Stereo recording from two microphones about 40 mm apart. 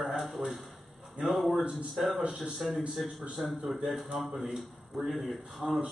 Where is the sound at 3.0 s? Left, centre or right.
Right.